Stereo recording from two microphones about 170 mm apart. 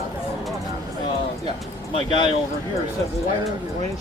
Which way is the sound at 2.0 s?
30° left (ahead or behind).